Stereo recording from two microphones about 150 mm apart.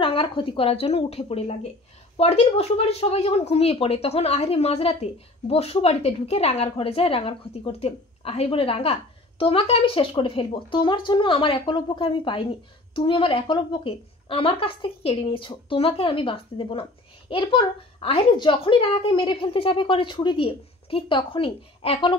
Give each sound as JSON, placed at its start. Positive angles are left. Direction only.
{"t": 0.0, "sound": "speech", "side_deg": 35}